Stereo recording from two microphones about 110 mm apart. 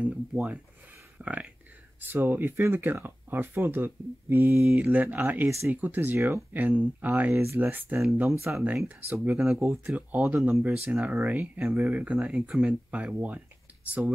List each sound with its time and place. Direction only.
0.0 s speech: 10° right (ahead or behind)
11.0 s speech: 20° right (ahead or behind)